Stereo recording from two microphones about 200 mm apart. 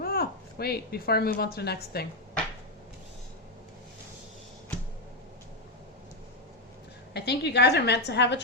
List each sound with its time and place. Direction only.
0.0 s speech: 50° left (ahead or behind)
7.1 s a woman's voice: 55° left (ahead or behind)